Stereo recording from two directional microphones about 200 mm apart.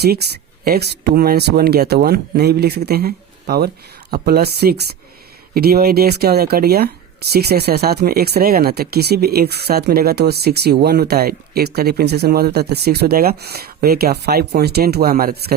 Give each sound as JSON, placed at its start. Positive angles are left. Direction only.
{"t": 0.0, "sound": "speech", "side_deg": -55}